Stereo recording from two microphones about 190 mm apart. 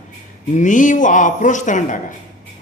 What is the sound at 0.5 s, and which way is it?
A man's voice, 40° left (ahead or behind).